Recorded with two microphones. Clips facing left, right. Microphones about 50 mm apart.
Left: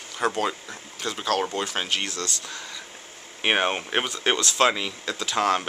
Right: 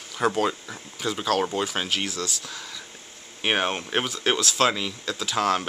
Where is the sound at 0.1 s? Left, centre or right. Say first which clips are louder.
Right 2 dB; centre.